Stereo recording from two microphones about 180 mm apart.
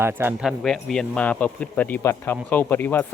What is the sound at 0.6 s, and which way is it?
Speech, centre (ahead or behind).